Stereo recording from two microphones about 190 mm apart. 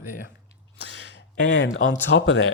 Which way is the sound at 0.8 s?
70° left (ahead or behind).